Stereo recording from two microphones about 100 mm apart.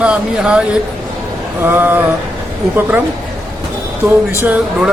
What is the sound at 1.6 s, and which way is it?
Speech, 20° right (ahead or behind).